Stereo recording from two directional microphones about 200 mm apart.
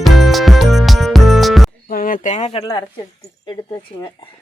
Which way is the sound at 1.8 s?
45° left (ahead or behind).